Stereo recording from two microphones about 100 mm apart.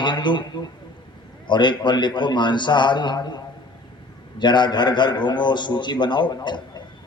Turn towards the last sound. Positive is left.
turn(degrees=50)  # may be behind; listen again after turning